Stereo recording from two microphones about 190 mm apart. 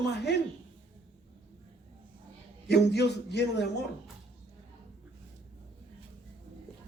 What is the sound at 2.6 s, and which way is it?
A man's voice, 60° left (ahead or behind).